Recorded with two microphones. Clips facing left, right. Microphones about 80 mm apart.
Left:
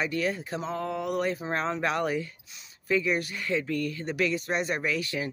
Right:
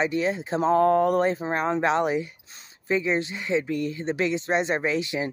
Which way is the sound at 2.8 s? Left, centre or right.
Right.